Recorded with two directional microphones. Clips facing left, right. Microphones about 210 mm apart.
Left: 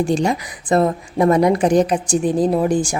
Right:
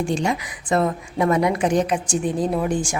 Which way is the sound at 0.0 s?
35° left (ahead or behind).